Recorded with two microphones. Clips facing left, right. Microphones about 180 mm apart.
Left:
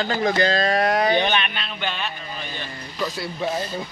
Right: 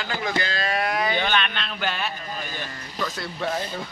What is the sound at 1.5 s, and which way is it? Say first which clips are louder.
Speech: even; centre (ahead or behind).